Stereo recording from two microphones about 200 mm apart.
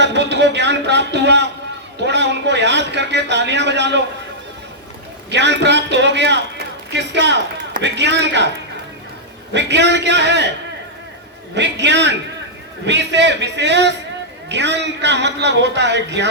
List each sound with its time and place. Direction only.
0.0 s a man's voice: 60° right (ahead or behind)
5.3 s a man's voice: 60° right (ahead or behind)
9.5 s a man's voice: 60° right (ahead or behind)
11.5 s a man's voice: 60° right (ahead or behind)